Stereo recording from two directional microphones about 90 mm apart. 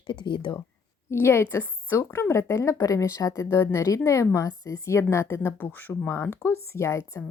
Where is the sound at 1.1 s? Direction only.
25° left (ahead or behind).